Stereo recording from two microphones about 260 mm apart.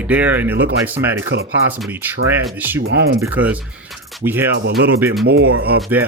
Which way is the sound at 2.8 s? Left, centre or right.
Right.